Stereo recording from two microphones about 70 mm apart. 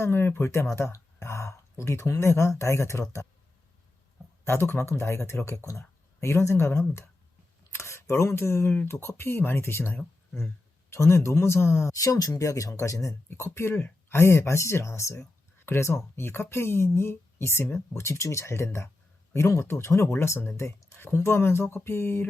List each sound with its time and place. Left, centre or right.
0.0 s speech: left
4.4 s speech: left
11.9 s speech: left
13.5 s speech: left